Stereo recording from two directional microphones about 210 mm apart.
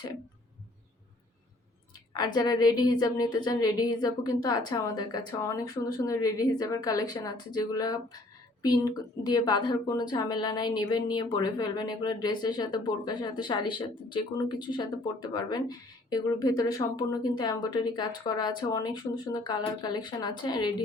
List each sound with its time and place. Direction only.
2.1 s a woman's voice: 20° left (ahead or behind)